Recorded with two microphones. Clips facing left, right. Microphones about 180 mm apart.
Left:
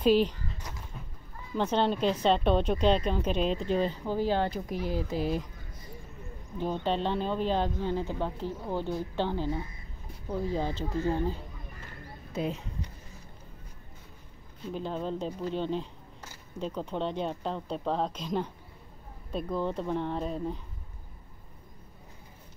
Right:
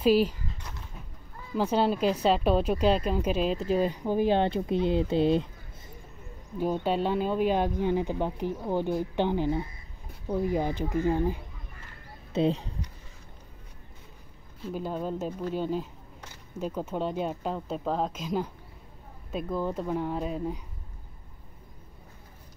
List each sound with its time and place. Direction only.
0.0 s speech: 10° right (ahead or behind)
1.5 s speech: 5° right (ahead or behind)
4.0 s speech: 15° right (ahead or behind)
6.6 s speech: 10° right (ahead or behind)
12.3 s speech: 30° right (ahead or behind)
14.6 s speech: 5° right (ahead or behind)